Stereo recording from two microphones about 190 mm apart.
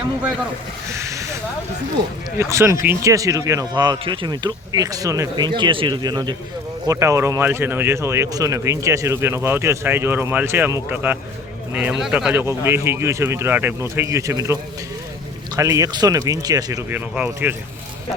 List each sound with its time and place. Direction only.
0.9 s speech: 15° right (ahead or behind)
2.4 s speech: 15° right (ahead or behind)